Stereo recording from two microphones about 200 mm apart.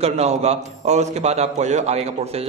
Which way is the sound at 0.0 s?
35° right (ahead or behind).